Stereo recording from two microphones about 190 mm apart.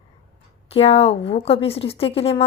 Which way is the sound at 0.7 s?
30° left (ahead or behind).